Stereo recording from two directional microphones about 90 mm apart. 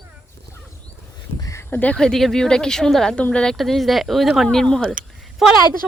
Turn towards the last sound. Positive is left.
turn(degrees=-5)  # may be behind; listen again after turning